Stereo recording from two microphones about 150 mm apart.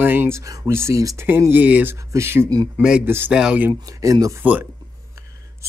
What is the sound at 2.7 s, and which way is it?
Speech, 10° right (ahead or behind).